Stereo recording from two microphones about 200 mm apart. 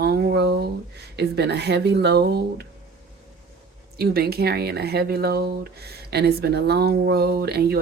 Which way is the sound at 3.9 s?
50° right (ahead or behind).